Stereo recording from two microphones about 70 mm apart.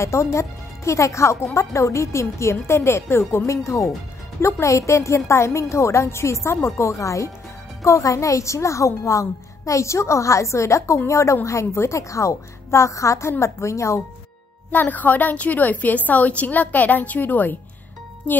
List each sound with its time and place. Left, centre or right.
0.0 s speech: left
14.7 s a woman's voice: left